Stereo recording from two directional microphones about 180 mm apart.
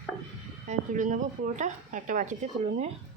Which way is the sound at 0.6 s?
45° right (ahead or behind).